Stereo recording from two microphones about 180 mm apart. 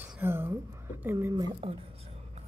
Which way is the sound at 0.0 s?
10° right (ahead or behind).